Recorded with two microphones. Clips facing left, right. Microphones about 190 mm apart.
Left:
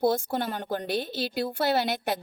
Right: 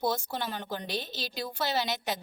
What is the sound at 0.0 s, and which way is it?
A woman's voice, 55° left (ahead or behind).